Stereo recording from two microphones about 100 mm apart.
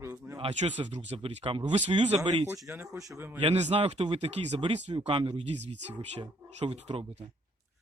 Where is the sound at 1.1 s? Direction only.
60° right (ahead or behind).